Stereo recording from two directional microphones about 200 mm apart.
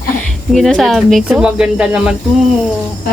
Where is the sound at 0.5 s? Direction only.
Centre (ahead or behind).